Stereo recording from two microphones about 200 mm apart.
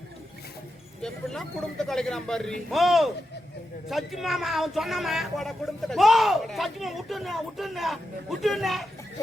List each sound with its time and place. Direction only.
1.0 s speech: 5° left (ahead or behind)